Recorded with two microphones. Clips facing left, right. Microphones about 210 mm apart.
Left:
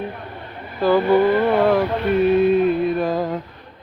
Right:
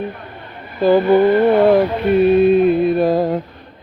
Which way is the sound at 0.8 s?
20° right (ahead or behind).